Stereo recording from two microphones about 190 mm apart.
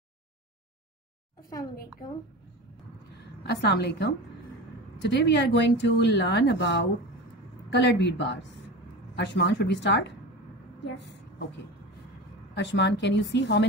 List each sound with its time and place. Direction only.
3.4 s a woman's voice: 60° left (ahead or behind)
11.0 s vehicle: 65° left (ahead or behind)
12.5 s a woman's voice: 65° left (ahead or behind)